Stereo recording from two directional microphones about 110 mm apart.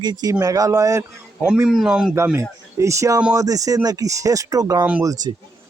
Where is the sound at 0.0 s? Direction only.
40° right (ahead or behind).